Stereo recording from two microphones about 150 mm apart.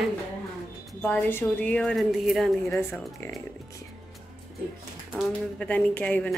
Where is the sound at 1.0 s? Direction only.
10° left (ahead or behind).